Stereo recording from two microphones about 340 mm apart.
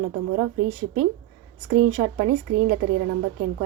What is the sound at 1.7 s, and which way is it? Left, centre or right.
Speech, right.